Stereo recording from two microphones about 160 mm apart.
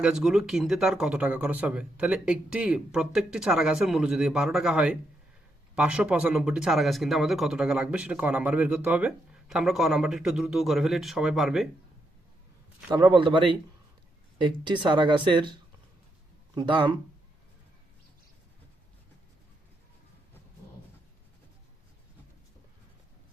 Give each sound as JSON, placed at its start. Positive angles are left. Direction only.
{"t": 0.0, "sound": "speech", "side_deg": -5}
{"t": 13.1, "sound": "a man's voice", "side_deg": -30}
{"t": 16.6, "sound": "speech", "side_deg": -30}